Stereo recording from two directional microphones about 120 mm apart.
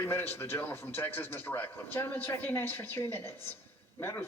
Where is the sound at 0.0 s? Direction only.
20° left (ahead or behind).